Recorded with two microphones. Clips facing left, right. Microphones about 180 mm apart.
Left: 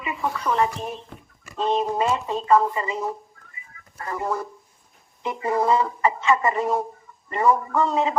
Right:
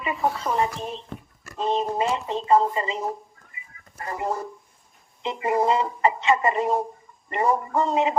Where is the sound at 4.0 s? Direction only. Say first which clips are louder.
Left 1 dB; 25° right (ahead or behind).